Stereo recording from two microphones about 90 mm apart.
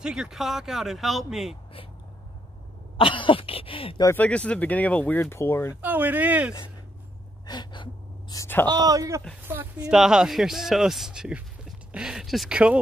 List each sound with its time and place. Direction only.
0.0 s speech: 5° right (ahead or behind)
3.0 s speech: 75° left (ahead or behind)
4.2 s speech: 15° left (ahead or behind); by 5.8 s 30° left (ahead or behind)
5.8 s speech: 20° right (ahead or behind)
7.4 s gasp: 55° left (ahead or behind)
8.6 s speech: 45° right (ahead or behind)
9.4 s speech: 25° right (ahead or behind)
9.8 s speech: 5° right (ahead or behind)